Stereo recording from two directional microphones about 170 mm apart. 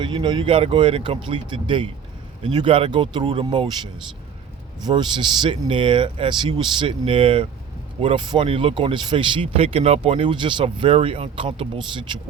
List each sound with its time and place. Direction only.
0.0 s speech: 30° right (ahead or behind)
4.8 s speech: 25° right (ahead or behind)